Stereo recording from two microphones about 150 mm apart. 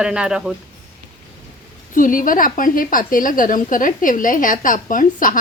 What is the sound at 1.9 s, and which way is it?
A woman's voice, 65° left (ahead or behind).